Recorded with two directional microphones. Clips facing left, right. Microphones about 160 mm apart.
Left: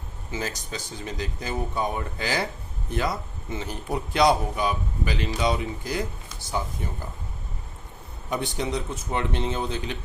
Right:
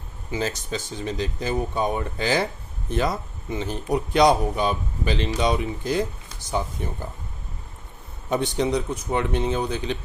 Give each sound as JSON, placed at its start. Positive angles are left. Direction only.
{"t": 0.3, "sound": "speech", "side_deg": -20}
{"t": 8.3, "sound": "speech", "side_deg": -20}